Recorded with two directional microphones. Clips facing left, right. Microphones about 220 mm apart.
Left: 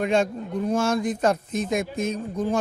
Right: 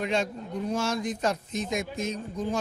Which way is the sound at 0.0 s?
50° left (ahead or behind).